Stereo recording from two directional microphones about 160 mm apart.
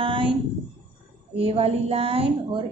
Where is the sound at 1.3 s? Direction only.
35° right (ahead or behind).